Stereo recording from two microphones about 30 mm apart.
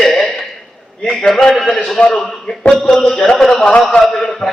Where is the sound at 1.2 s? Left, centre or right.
Centre.